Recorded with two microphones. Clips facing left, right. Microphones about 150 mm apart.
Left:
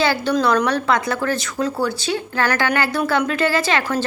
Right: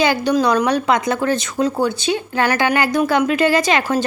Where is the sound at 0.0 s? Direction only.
15° right (ahead or behind).